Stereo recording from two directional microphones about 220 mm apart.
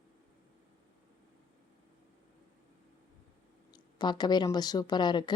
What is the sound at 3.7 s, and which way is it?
A woman's voice, 20° left (ahead or behind).